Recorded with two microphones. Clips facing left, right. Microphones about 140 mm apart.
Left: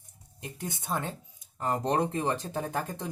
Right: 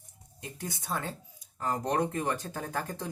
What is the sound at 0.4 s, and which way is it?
Speech, 20° left (ahead or behind).